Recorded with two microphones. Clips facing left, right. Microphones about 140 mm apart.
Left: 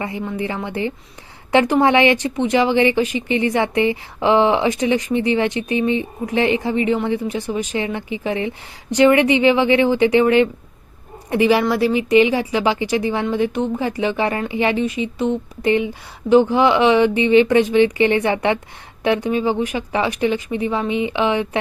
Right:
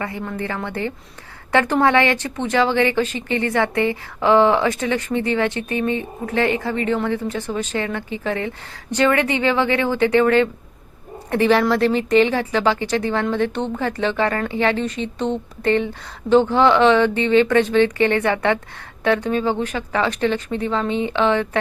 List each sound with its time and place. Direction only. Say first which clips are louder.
0.0 s speech: left 2 dB; 15° left (ahead or behind)